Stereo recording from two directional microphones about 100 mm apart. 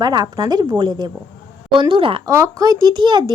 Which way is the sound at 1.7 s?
55° right (ahead or behind).